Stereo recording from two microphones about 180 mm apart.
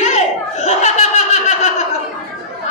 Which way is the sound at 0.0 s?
40° left (ahead or behind).